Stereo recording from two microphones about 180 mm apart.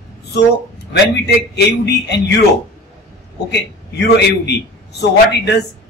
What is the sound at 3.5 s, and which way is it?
Speech, 70° left (ahead or behind).